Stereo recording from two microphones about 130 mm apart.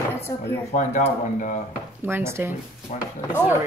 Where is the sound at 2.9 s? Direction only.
70° left (ahead or behind).